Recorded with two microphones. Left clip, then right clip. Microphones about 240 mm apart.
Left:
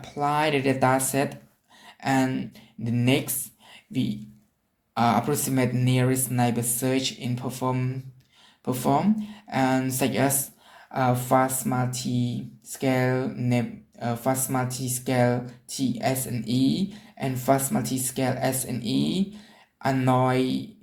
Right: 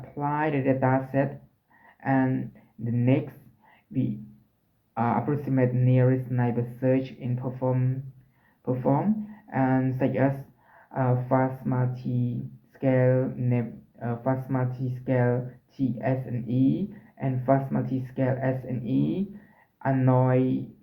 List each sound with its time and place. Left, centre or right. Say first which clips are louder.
0.2 s speech: left 4 dB; left
4.9 s speech: left 4 dB; left